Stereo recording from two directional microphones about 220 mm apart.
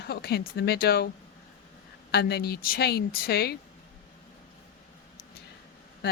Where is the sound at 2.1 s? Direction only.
45° left (ahead or behind).